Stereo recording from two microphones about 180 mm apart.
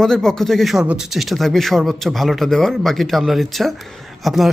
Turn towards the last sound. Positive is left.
turn(degrees=0)  # may be behind; listen again after turning